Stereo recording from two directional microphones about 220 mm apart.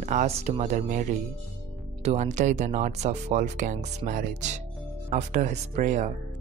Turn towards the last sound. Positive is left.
turn(degrees=-35)  # may be behind; listen again after turning